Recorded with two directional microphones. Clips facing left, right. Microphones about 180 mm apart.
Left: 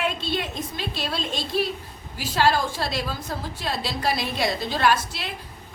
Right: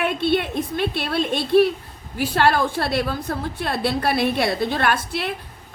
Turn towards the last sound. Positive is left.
turn(degrees=-55)  # may be behind; listen again after turning